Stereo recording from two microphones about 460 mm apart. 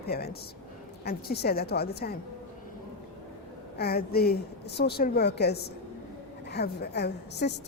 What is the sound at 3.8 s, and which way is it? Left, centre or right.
A woman's voice, centre.